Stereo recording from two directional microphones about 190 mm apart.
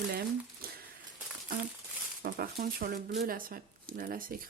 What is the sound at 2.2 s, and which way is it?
Speech, 55° right (ahead or behind).